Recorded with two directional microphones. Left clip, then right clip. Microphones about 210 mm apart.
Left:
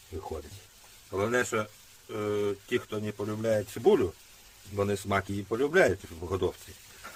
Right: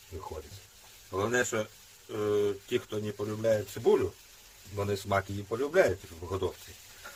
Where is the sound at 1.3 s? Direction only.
35° left (ahead or behind).